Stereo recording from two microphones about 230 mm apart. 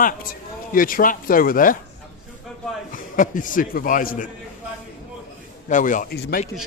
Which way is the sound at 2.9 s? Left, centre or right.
Left.